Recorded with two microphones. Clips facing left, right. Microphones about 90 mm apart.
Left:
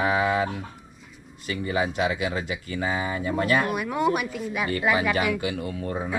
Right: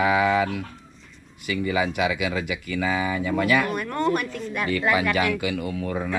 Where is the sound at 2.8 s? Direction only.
90° right.